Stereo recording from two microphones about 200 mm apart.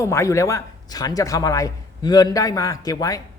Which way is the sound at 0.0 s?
15° left (ahead or behind).